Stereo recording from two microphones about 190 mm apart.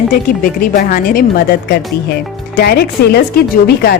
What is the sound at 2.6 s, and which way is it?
Speech, 55° left (ahead or behind).